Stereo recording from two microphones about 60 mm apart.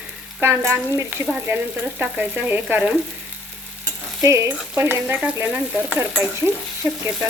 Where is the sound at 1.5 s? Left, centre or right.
Right.